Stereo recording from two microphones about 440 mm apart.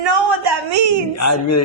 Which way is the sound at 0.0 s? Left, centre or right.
Right.